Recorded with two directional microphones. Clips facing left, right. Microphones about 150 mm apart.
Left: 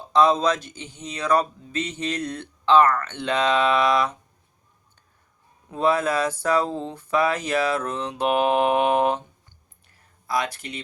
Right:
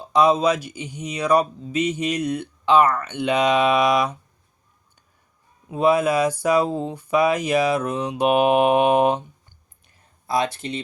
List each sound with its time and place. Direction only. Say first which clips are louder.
0.1 s speech: right 2 dB; 10° right (ahead or behind)
5.6 s speech: right 3 dB; 15° right (ahead or behind)
9.8 s a sound: right 2 dB; 20° right (ahead or behind)